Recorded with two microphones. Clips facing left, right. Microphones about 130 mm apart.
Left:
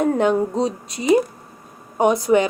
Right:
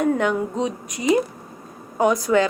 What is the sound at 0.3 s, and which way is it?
A woman's voice, 35° left (ahead or behind).